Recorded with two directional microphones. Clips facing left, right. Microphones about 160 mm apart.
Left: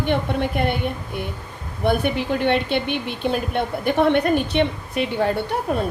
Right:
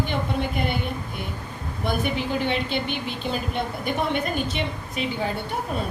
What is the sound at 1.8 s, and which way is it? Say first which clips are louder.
A woman's voice: left 5 dB; 60° left (ahead or behind).